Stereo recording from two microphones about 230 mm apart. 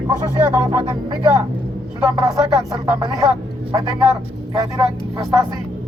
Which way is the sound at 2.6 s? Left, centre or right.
Centre.